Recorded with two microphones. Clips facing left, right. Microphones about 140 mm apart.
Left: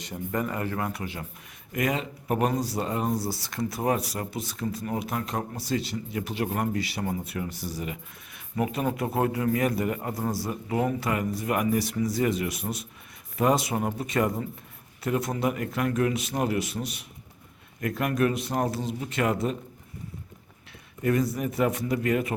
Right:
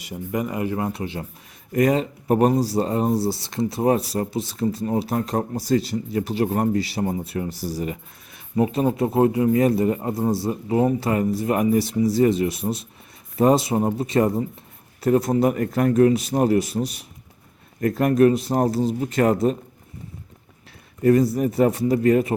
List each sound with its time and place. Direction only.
0.0 s a man's voice: 10° right (ahead or behind)
1.7 s a man's voice: 35° right (ahead or behind)
21.0 s speech: 35° right (ahead or behind)